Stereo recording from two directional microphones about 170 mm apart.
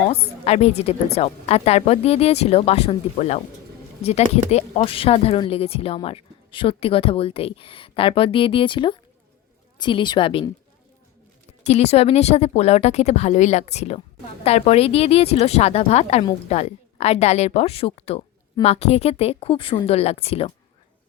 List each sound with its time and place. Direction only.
0.1 s a woman's voice: 40° left (ahead or behind)
11.6 s speech: 40° left (ahead or behind)